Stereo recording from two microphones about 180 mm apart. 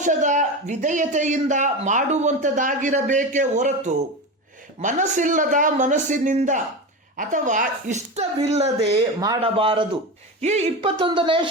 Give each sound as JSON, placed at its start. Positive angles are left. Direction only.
{"t": 0.0, "sound": "speech", "side_deg": -45}